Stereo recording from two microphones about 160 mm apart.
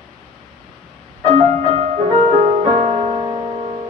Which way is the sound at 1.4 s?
45° right (ahead or behind).